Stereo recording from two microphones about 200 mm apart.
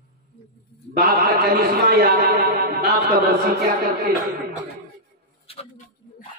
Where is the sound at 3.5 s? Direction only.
50° right (ahead or behind).